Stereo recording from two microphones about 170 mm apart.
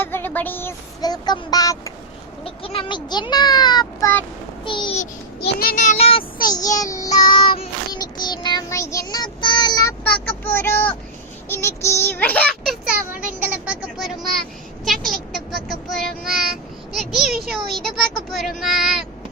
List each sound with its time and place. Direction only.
0.0 s a sound: 10° left (ahead or behind)
1.0 s child singing: 25° left (ahead or behind)
2.4 s child singing: 35° left (ahead or behind)
5.4 s a child's voice: 60° left (ahead or behind); by 6.2 s 35° left (ahead or behind)
6.5 s child singing: 20° left (ahead or behind)
7.3 s child singing: 60° left (ahead or behind)
7.9 s child singing: 25° left (ahead or behind)
10.2 s a child's voice: 10° left (ahead or behind)
13.1 s a sound: 10° right (ahead or behind)
14.8 s child singing: centre (ahead or behind)
16.9 s speech: centre (ahead or behind)